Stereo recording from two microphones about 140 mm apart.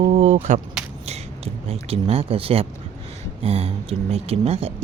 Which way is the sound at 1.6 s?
45° right (ahead or behind).